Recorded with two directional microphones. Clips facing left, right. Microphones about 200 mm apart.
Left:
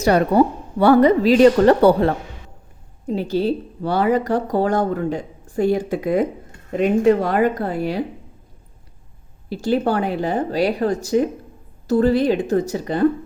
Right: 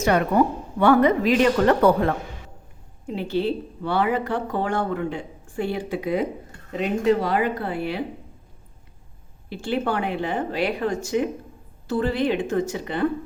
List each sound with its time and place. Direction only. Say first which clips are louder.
0.0 s a woman's voice: left 4 dB; 35° left (ahead or behind)
9.5 s a woman's voice: left 6 dB; 40° left (ahead or behind)